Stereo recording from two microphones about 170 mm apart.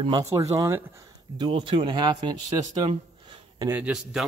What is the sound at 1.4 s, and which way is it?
A man's voice, 30° right (ahead or behind).